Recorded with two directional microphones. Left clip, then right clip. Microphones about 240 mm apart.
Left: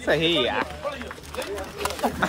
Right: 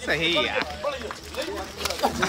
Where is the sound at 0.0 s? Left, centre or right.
Centre.